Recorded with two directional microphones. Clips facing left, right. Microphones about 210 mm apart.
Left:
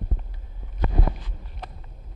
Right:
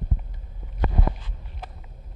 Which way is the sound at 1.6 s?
5° right (ahead or behind).